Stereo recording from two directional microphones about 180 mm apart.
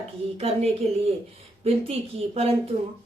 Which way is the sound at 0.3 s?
35° right (ahead or behind).